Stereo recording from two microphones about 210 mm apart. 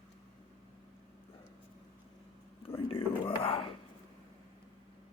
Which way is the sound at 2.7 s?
25° left (ahead or behind).